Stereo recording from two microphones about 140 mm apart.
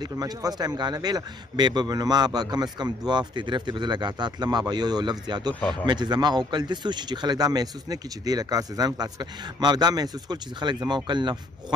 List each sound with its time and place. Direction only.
0.0 s a man's voice: 25° right (ahead or behind)
5.5 s speech: 10° left (ahead or behind)
5.9 s a man's voice: 30° right (ahead or behind)